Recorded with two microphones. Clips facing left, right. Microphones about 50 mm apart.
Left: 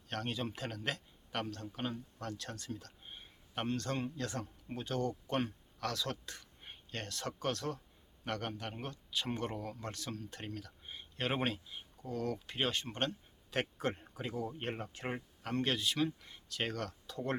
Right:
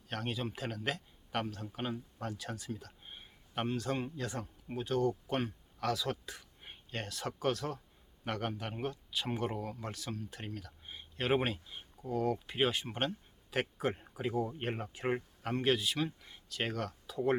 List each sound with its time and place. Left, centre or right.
0.1 s a man's voice: centre